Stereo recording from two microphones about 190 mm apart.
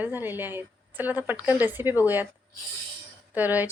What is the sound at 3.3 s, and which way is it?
Speech, 10° right (ahead or behind).